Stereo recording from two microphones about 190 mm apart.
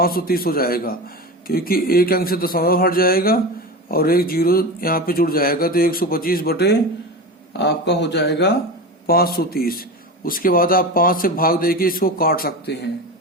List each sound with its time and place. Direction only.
0.0 s a man's voice: 50° left (ahead or behind)